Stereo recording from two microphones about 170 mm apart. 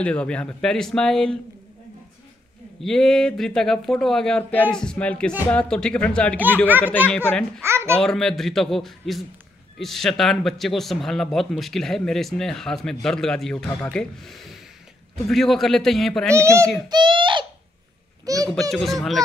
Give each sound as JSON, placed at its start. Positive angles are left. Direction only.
{"t": 0.0, "sound": "speech", "side_deg": 5}
{"t": 2.8, "sound": "speech", "side_deg": 0}
{"t": 7.6, "sound": "babbling", "side_deg": -15}
{"t": 7.9, "sound": "speech", "side_deg": 5}
{"t": 16.3, "sound": "a child's voice", "side_deg": -15}
{"t": 16.9, "sound": "a child's voice", "side_deg": -30}
{"t": 18.2, "sound": "a sound", "side_deg": -20}
{"t": 18.5, "sound": "speech", "side_deg": 0}